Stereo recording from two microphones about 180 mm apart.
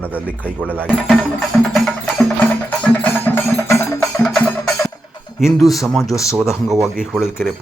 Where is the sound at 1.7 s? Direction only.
Centre (ahead or behind).